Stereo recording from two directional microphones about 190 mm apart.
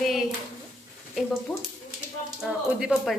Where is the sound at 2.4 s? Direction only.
5° right (ahead or behind).